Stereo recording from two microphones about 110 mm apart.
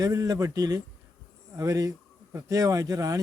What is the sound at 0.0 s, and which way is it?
A man's voice, 35° right (ahead or behind).